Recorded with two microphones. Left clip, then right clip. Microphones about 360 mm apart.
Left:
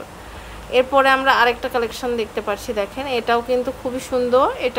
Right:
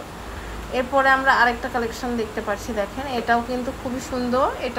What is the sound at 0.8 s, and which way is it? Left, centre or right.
A woman's voice, left.